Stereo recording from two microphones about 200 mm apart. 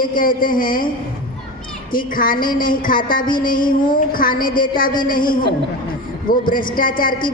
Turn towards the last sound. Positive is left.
turn(degrees=45)  # may be behind; listen again after turning